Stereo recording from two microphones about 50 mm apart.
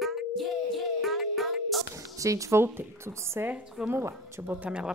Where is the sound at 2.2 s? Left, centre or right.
Right.